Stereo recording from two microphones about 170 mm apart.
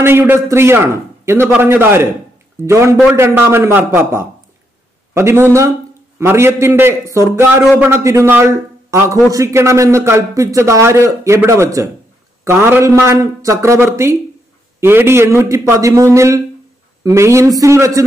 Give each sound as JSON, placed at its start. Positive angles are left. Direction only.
{"t": 0.0, "sound": "a man's voice", "side_deg": -15}